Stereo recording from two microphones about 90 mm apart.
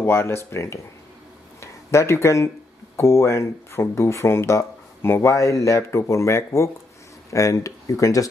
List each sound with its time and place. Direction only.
0.0 s speech: 25° left (ahead or behind)